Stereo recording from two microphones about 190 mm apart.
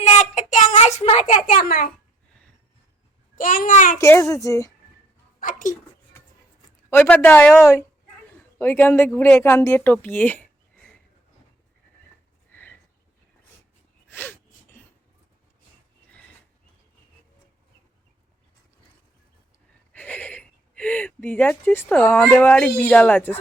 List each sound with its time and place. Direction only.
0.0 s child singing: 40° left (ahead or behind)
1.5 s a child's voice: 50° left (ahead or behind)
3.3 s a child's voice: 45° left (ahead or behind)
3.9 s speech: 15° left (ahead or behind)
5.4 s speech: 45° left (ahead or behind)
6.9 s speech: 10° left (ahead or behind)
12.5 s a sound: 10° left (ahead or behind)
14.1 s gasp: 10° left (ahead or behind)
19.9 s speech: 10° left (ahead or behind)